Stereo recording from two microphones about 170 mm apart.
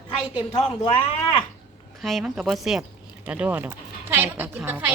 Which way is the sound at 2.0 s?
Centre (ahead or behind).